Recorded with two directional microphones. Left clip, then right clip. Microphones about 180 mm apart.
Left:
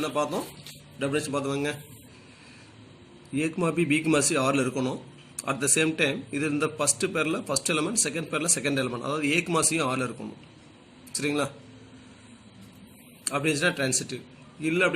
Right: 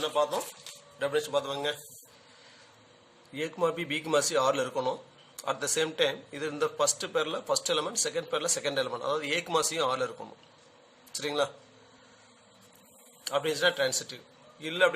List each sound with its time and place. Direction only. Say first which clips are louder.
1.0 s a man's voice: left 1 dB; 45° right (ahead or behind)
3.4 s a man's voice: left 2 dB; 45° right (ahead or behind)
11.2 s a man's voice: left 2 dB; 45° right (ahead or behind)
13.2 s a man's voice: left 1 dB; 45° right (ahead or behind)